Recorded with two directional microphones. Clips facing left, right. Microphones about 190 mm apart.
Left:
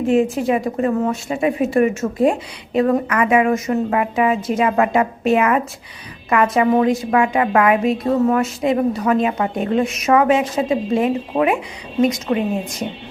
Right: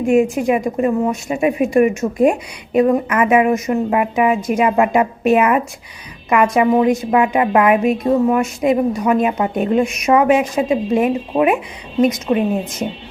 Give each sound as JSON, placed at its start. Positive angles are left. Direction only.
{"t": 0.0, "sound": "a woman's voice", "side_deg": -15}